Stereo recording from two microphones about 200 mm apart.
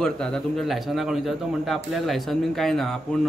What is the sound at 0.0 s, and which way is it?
Speech, 5° left (ahead or behind).